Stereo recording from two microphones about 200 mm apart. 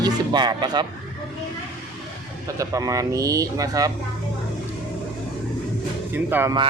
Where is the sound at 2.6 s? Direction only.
15° right (ahead or behind).